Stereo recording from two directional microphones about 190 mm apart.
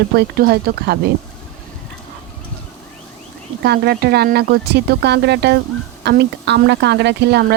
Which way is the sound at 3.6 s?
60° right (ahead or behind).